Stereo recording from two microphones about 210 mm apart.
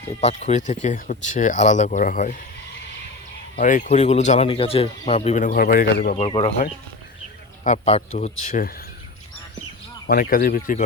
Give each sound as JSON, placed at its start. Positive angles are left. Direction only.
{"t": 0.1, "sound": "speech", "side_deg": 30}
{"t": 3.5, "sound": "speech", "side_deg": 40}
{"t": 6.1, "sound": "speech", "side_deg": 25}
{"t": 7.6, "sound": "speech", "side_deg": 35}
{"t": 10.1, "sound": "speech", "side_deg": 40}